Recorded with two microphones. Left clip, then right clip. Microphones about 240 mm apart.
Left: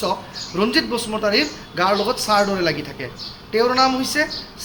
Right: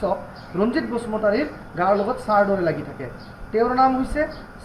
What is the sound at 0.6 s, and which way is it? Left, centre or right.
A man's voice, left.